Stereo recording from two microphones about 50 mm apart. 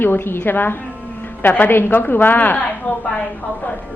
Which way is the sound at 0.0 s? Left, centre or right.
Left.